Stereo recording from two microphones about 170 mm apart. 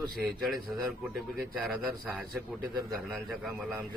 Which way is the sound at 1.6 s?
Centre (ahead or behind).